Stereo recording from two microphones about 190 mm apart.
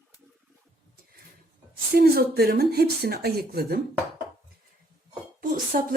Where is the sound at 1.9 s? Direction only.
50° right (ahead or behind).